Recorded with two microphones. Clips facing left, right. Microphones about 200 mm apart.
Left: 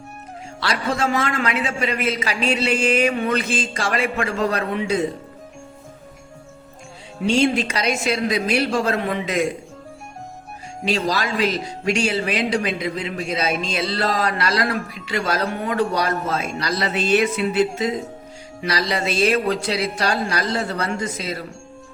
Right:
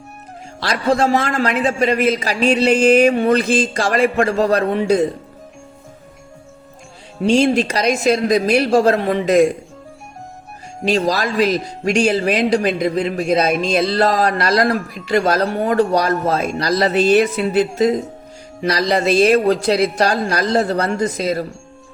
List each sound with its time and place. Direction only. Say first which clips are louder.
0.6 s speech: right 6 dB; 40° right (ahead or behind)
7.3 s speech: right 4 dB; 40° right (ahead or behind)
10.8 s speech: right 5 dB; 40° right (ahead or behind)
13.7 s a sound: right 9 dB; 40° right (ahead or behind)
15.5 s speech: right 6 dB; 35° right (ahead or behind)